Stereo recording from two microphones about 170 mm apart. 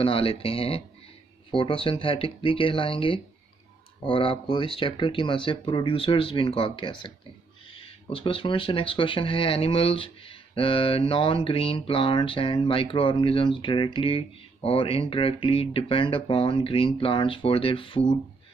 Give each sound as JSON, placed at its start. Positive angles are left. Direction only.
{"t": 0.0, "sound": "speech", "side_deg": 35}